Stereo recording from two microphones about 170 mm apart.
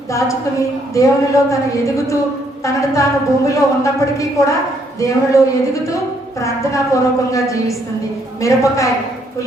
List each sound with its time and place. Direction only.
0.9 s a woman's voice: 20° left (ahead or behind)